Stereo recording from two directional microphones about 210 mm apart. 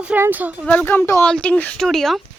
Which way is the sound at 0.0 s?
5° right (ahead or behind).